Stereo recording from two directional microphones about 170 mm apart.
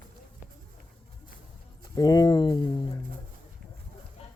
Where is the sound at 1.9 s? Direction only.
20° left (ahead or behind).